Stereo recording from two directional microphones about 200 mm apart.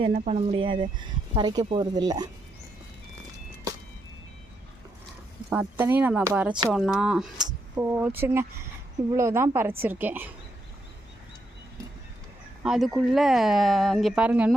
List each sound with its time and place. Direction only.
0.0 s speech: 35° right (ahead or behind)
5.5 s speech: 10° right (ahead or behind)
12.6 s speech: centre (ahead or behind)